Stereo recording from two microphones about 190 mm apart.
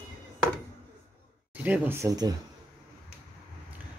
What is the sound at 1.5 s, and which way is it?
Speech, 10° right (ahead or behind).